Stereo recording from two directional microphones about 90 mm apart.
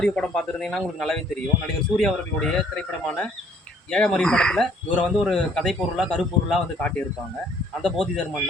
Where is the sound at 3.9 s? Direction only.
10° left (ahead or behind).